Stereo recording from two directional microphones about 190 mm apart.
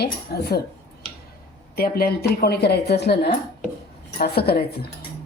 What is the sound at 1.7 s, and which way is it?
A woman's voice, 55° left (ahead or behind).